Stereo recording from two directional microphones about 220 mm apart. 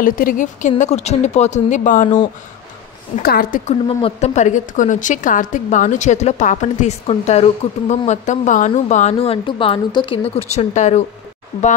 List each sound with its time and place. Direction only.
0.0 s a woman's voice: 40° left (ahead or behind)
3.2 s speech: 45° left (ahead or behind)
3.8 s a woman's voice: 25° left (ahead or behind)